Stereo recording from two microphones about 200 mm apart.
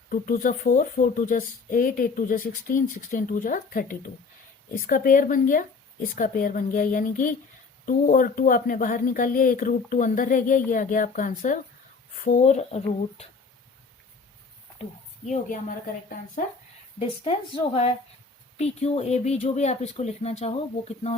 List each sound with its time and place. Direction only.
0.1 s speech: 40° left (ahead or behind)
17.2 s speech: 30° left (ahead or behind)